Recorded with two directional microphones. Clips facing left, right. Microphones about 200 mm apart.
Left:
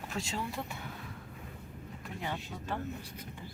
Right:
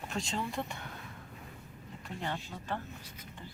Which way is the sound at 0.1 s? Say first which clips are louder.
Right 1 dB; 5° left (ahead or behind).